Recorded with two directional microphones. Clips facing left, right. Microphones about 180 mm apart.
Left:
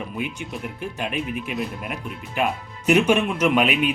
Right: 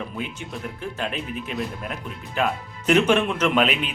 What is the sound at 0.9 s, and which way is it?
Speech, 15° left (ahead or behind).